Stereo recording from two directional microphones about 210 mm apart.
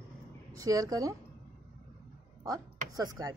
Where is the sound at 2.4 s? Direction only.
15° right (ahead or behind).